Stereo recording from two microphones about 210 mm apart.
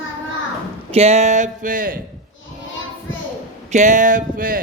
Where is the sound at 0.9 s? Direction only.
30° right (ahead or behind).